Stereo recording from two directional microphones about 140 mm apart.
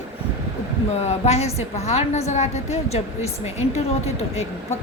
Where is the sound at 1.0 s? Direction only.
50° left (ahead or behind).